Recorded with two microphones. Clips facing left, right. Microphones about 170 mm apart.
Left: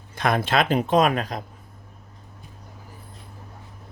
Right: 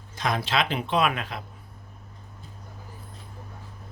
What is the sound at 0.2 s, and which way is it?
Speech, 55° left (ahead or behind).